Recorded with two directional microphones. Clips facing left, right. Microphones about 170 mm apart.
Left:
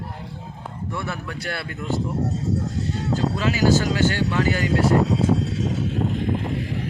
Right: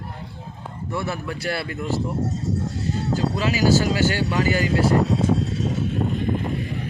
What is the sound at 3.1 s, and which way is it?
Speech, 5° right (ahead or behind).